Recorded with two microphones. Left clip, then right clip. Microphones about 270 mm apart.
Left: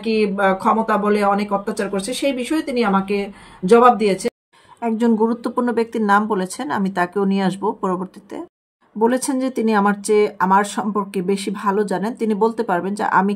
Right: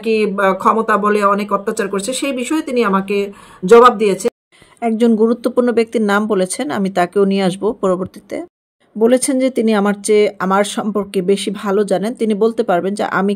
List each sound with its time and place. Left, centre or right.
0.0 s speech: centre